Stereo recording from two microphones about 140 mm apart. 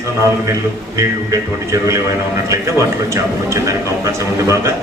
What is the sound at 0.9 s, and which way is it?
Speech, 20° right (ahead or behind).